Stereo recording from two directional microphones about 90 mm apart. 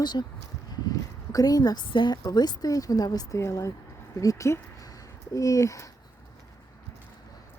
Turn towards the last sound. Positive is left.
turn(degrees=35)  # may be behind; listen again after turning